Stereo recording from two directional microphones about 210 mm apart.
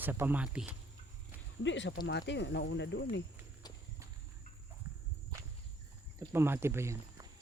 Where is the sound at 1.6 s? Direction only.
60° left (ahead or behind).